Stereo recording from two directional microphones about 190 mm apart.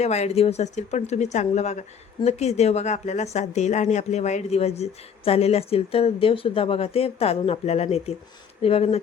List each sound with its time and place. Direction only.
0.0 s a woman's voice: 35° left (ahead or behind)